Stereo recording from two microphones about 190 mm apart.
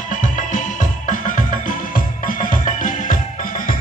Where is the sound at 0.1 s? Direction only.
45° left (ahead or behind).